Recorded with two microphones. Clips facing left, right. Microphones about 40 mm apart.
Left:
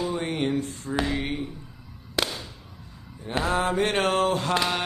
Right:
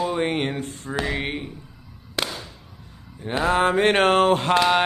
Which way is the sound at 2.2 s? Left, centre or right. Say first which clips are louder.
Even; centre.